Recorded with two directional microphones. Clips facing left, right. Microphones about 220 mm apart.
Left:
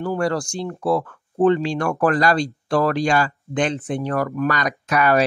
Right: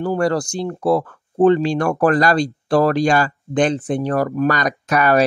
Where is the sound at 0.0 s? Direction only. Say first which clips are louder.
Right 3 dB; 35° right (ahead or behind).